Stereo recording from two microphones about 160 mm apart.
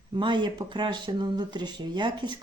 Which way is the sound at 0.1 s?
30° right (ahead or behind).